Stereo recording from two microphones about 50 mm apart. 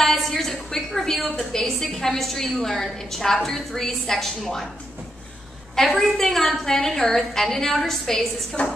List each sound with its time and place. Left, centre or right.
0.0 s a sound: centre
1.4 s a woman's voice: centre
5.8 s a woman's voice: centre